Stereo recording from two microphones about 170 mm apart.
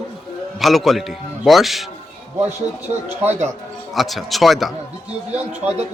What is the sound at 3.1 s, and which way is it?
Speech, 10° right (ahead or behind).